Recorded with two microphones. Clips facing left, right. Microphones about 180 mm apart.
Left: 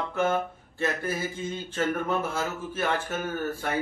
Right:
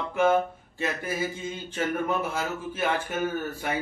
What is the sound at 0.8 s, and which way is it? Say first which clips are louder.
Speech: left 1 dB; 15° right (ahead or behind).